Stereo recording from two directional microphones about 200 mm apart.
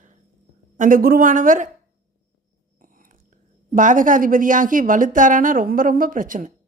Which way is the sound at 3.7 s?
40° right (ahead or behind).